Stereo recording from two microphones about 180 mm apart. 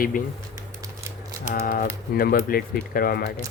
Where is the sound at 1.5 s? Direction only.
55° left (ahead or behind).